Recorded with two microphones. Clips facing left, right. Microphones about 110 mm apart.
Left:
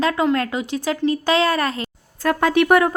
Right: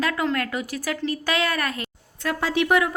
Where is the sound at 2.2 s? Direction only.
55° left (ahead or behind).